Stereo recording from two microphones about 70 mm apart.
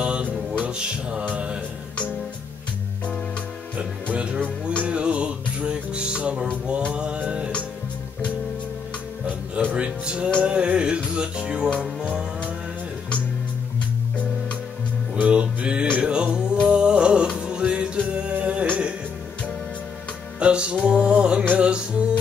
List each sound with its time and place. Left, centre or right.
0.0 s music: centre
3.7 s music: centre
6.9 s mantra: centre
9.7 s music: centre
15.1 s music: centre
20.3 s music: centre